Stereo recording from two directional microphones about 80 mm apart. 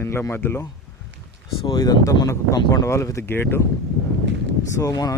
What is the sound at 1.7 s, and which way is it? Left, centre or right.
Speech, left.